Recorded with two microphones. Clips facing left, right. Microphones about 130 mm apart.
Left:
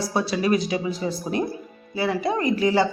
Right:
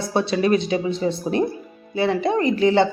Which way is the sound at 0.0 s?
25° right (ahead or behind).